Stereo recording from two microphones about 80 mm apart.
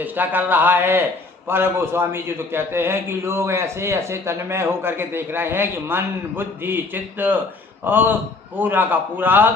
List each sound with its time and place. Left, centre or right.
0.0 s a man's voice: right